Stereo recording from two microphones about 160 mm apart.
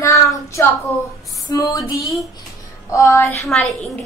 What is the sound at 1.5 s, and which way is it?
A child's voice, 20° left (ahead or behind).